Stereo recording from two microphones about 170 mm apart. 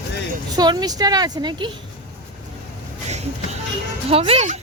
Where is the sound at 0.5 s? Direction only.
25° right (ahead or behind).